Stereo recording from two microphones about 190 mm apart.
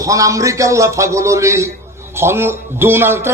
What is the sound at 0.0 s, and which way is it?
Speech, 15° right (ahead or behind).